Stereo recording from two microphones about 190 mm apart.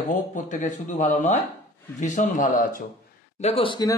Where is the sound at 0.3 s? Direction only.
40° left (ahead or behind).